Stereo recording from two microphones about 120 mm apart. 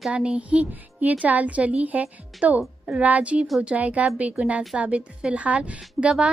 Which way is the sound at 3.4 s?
Centre (ahead or behind).